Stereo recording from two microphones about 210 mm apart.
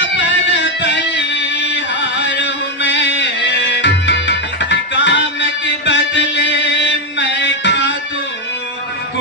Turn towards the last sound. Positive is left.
turn(degrees=55)  # may be behind; listen again after turning